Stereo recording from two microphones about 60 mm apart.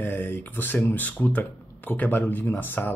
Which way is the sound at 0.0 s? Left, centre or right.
Left.